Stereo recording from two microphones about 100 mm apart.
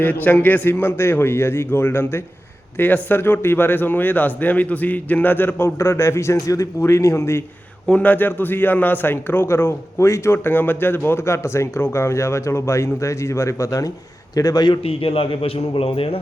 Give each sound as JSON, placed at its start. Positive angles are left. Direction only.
{"t": 0.0, "sound": "a man's voice", "side_deg": 15}
{"t": 7.9, "sound": "a man's voice", "side_deg": 15}
{"t": 14.8, "sound": "a man's voice", "side_deg": 70}